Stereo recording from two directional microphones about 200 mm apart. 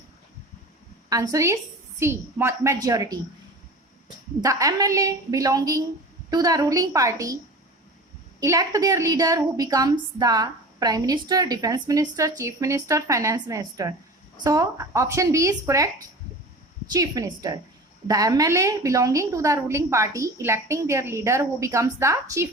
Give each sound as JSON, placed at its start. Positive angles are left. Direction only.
{"t": 1.1, "sound": "a woman's voice", "side_deg": -15}
{"t": 4.4, "sound": "a woman's voice", "side_deg": -15}
{"t": 8.4, "sound": "a woman's voice", "side_deg": -15}
{"t": 16.9, "sound": "a woman's voice", "side_deg": -20}